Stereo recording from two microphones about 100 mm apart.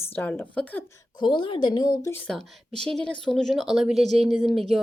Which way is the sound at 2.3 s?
5° left (ahead or behind).